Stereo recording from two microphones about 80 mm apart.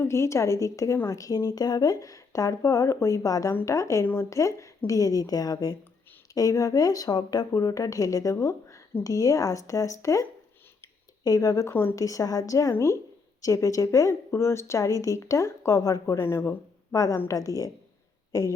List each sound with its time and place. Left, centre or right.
0.0 s a woman's voice: left
11.7 s a woman's voice: left
11.9 s a woman's voice: left
16.9 s speech: left